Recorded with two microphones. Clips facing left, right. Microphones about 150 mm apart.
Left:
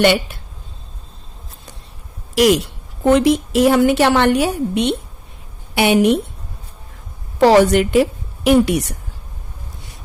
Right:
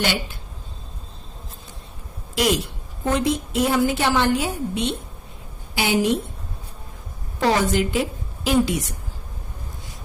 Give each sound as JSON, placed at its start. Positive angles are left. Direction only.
{"t": 0.0, "sound": "a woman's voice", "side_deg": 65}
{"t": 2.3, "sound": "a woman's voice", "side_deg": 70}
{"t": 7.3, "sound": "a woman's voice", "side_deg": 75}